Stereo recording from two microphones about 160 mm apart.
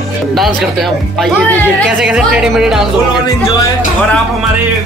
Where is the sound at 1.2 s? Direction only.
10° left (ahead or behind).